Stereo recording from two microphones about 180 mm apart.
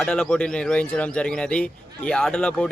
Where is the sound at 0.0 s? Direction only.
5° left (ahead or behind).